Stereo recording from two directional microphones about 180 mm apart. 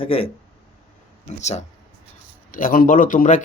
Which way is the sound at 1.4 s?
40° left (ahead or behind).